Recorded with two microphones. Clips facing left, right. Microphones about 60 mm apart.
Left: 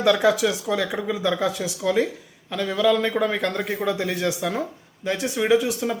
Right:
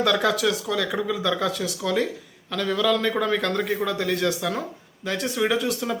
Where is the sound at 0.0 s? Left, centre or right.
Centre.